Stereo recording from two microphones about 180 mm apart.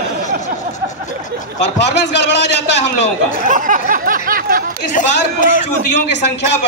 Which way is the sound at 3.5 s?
45° right (ahead or behind).